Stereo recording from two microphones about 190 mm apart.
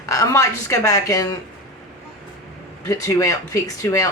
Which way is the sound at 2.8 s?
15° left (ahead or behind).